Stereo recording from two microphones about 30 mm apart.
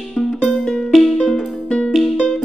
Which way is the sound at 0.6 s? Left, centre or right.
Centre.